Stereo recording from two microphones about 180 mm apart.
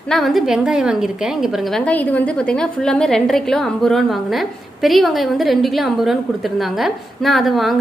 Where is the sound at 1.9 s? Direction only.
10° left (ahead or behind).